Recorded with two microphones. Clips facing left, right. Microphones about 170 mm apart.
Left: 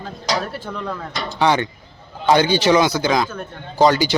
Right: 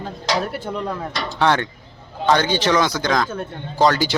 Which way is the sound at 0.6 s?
20° right (ahead or behind).